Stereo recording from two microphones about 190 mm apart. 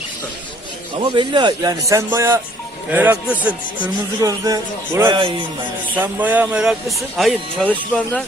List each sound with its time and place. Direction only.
1.1 s a man's voice: 25° right (ahead or behind); by 3.5 s 10° right (ahead or behind)
4.2 s a man's voice: 20° right (ahead or behind); by 8.2 s 5° left (ahead or behind)